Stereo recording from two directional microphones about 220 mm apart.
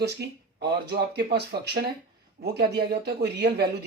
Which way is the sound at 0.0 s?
50° right (ahead or behind).